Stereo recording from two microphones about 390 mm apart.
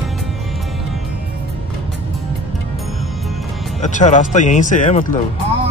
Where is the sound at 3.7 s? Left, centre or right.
Centre.